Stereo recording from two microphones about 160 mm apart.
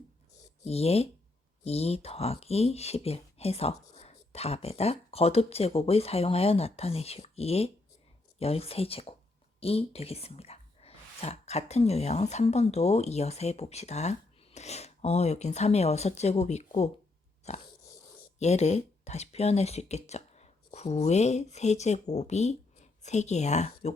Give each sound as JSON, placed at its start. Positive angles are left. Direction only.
{"t": 0.6, "sound": "speech", "side_deg": 40}